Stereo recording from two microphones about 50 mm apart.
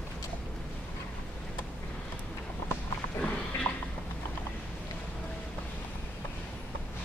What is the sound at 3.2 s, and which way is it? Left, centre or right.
Roaring cats, left.